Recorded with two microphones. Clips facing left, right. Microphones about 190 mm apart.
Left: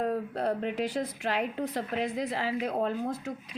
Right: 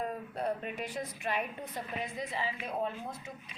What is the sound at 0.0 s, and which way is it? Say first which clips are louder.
A woman's voice: left 6 dB; 75° left (ahead or behind).